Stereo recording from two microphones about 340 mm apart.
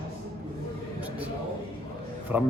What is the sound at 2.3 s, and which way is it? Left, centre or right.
Speech, centre.